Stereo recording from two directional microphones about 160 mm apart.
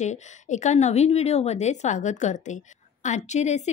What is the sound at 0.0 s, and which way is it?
A woman's voice, 45° left (ahead or behind).